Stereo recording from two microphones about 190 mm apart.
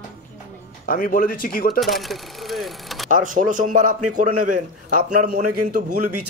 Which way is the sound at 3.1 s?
45° right (ahead or behind).